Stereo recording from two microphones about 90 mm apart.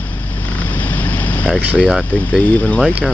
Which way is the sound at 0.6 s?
20° left (ahead or behind).